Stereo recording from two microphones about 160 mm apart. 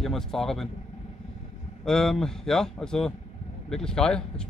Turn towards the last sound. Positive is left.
turn(degrees=5)  # may be behind; listen again after turning